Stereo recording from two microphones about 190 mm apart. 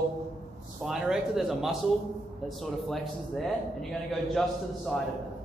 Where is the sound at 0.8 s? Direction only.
Centre (ahead or behind).